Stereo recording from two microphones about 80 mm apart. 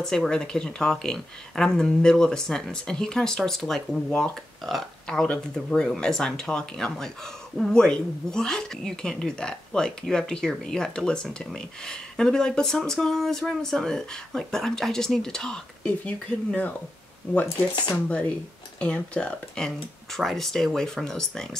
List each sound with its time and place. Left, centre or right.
0.0 s speech: centre
16.0 s speech: centre
18.8 s speech: centre